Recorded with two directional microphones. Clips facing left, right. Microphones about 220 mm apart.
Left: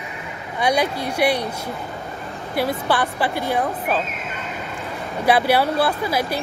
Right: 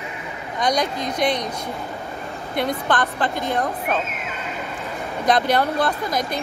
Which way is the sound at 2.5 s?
5° left (ahead or behind).